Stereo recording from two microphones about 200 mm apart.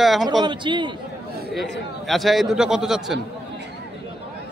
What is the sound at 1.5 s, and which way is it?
A man's voice, centre (ahead or behind).